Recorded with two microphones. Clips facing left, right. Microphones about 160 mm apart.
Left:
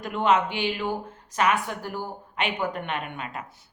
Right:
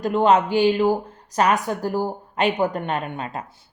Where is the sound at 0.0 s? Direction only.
35° right (ahead or behind).